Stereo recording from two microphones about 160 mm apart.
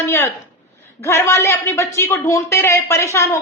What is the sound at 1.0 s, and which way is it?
Speech, 15° left (ahead or behind).